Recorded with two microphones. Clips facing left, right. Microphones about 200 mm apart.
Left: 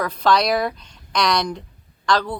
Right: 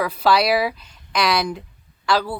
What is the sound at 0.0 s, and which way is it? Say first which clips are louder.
Speech: right 1 dB; 5° right (ahead or behind).